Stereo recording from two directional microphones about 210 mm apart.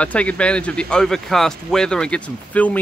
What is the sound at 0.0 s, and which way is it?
Speech, 5° left (ahead or behind).